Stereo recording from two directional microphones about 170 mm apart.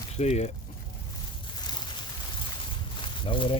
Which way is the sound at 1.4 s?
25° left (ahead or behind).